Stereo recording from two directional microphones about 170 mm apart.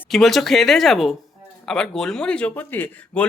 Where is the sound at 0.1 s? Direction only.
Centre (ahead or behind).